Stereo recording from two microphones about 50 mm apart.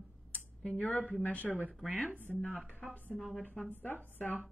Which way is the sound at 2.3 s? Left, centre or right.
Centre.